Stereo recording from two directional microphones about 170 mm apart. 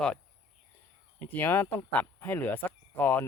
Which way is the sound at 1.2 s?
10° left (ahead or behind).